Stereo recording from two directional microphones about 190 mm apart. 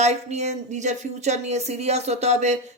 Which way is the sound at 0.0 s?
35° right (ahead or behind).